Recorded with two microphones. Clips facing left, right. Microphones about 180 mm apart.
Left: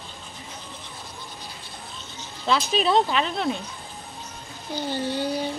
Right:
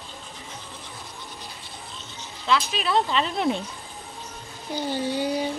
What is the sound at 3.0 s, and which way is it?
Speech, 5° left (ahead or behind).